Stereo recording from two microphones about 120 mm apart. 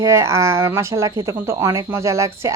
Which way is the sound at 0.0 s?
25° right (ahead or behind).